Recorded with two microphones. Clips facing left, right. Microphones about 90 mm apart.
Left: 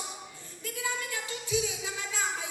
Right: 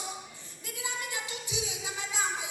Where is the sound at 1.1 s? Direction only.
20° right (ahead or behind).